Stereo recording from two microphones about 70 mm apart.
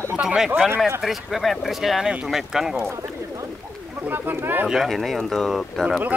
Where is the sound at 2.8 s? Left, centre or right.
Right.